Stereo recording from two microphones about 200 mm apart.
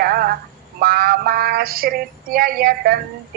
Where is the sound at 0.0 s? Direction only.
50° right (ahead or behind).